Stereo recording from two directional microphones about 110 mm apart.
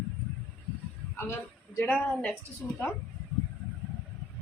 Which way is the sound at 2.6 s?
15° left (ahead or behind).